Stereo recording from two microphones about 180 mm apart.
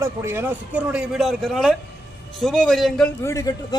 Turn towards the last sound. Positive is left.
turn(degrees=20)  # may be behind; listen again after turning